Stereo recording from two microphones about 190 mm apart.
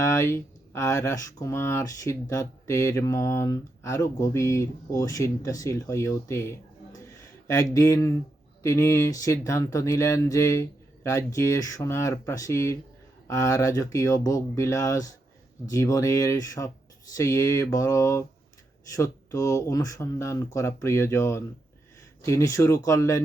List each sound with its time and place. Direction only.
0.0 s speech: 15° left (ahead or behind)